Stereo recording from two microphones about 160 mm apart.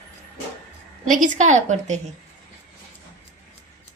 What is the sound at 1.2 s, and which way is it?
Speech, 50° right (ahead or behind).